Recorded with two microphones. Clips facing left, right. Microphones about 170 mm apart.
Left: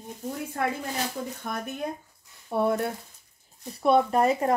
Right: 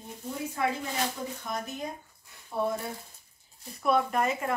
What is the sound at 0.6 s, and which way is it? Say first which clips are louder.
Speech: left 1 dB; 55° left (ahead or behind).